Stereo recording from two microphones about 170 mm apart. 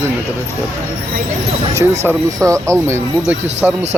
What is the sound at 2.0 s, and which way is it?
Speech, 15° right (ahead or behind).